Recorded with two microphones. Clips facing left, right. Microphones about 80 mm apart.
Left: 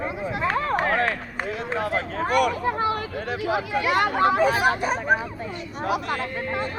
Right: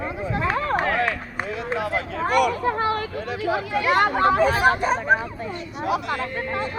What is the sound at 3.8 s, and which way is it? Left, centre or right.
Speech, right.